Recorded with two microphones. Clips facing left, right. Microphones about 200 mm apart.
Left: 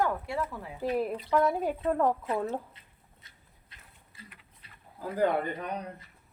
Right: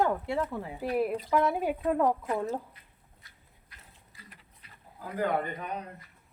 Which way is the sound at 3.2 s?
25° left (ahead or behind).